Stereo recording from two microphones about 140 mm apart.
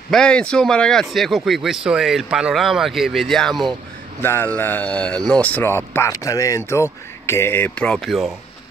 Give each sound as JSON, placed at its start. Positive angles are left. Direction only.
{"t": 0.1, "sound": "speech", "side_deg": 5}
{"t": 4.2, "sound": "speech", "side_deg": 15}